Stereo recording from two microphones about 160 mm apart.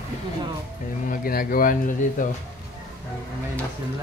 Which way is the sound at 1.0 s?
65° left (ahead or behind).